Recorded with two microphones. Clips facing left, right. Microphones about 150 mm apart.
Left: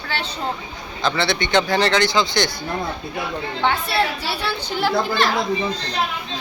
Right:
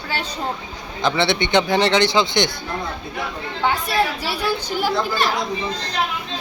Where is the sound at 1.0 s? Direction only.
20° right (ahead or behind).